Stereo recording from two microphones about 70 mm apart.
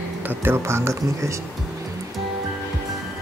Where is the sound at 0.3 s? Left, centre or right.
Right.